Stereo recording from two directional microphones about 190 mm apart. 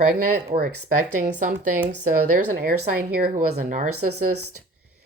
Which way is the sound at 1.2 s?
40° right (ahead or behind).